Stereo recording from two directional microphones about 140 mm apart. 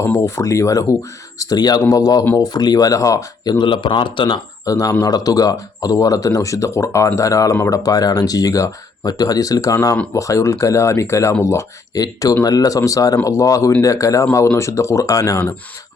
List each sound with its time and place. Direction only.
0.0 s speech: 20° left (ahead or behind)